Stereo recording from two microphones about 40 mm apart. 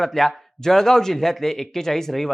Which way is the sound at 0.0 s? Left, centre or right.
Centre.